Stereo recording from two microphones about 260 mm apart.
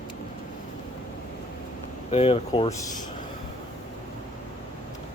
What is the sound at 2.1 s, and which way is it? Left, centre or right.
Speech, left.